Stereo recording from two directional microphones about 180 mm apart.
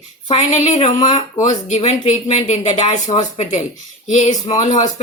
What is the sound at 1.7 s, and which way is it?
A woman's voice, 35° left (ahead or behind).